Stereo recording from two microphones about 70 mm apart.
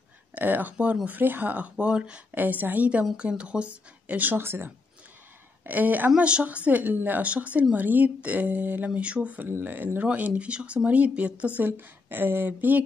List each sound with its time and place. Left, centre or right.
0.3 s speech: right